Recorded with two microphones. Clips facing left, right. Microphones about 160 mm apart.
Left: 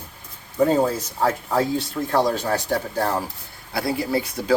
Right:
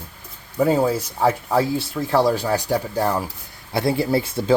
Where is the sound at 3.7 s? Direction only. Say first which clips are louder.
Right 3 dB; 25° right (ahead or behind).